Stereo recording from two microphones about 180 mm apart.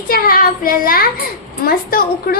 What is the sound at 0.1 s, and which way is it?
A child's voice, 55° left (ahead or behind).